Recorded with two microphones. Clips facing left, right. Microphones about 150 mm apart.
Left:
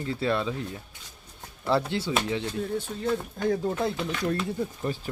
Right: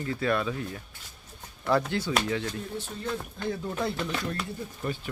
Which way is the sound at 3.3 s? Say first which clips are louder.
Left 6 dB; 45° left (ahead or behind).